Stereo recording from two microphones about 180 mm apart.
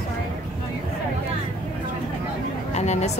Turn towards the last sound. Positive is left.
turn(degrees=40)  # may be behind; listen again after turning